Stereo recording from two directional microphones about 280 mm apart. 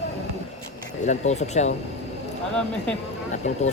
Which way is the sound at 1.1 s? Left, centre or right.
Left.